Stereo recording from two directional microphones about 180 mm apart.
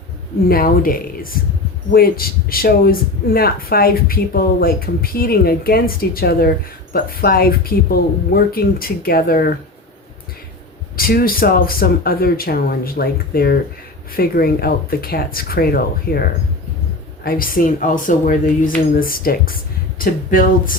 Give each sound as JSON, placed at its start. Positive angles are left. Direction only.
{"t": 0.4, "sound": "speech", "side_deg": 55}
{"t": 10.9, "sound": "speech", "side_deg": 55}
{"t": 17.2, "sound": "speech", "side_deg": 55}